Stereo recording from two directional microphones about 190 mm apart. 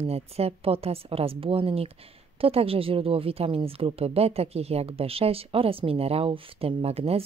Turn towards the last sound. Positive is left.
turn(degrees=-30)  # may be behind; listen again after turning